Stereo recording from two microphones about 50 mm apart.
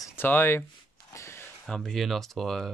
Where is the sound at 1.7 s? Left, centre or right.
Centre.